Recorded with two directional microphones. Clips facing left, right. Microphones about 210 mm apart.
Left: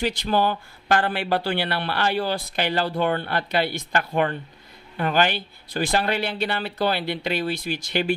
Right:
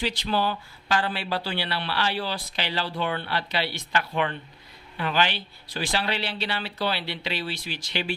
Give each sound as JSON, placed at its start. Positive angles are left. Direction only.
{"t": 0.0, "sound": "speech", "side_deg": 50}